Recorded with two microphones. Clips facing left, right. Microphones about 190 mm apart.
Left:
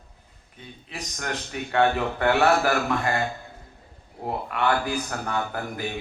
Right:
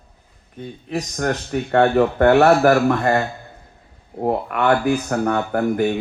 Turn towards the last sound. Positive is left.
turn(degrees=-55)  # may be behind; listen again after turning